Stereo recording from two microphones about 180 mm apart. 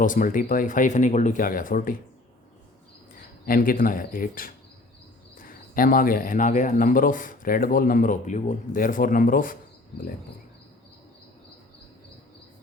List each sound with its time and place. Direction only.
0.0 s speech: 45° left (ahead or behind)
3.4 s speech: 50° left (ahead or behind)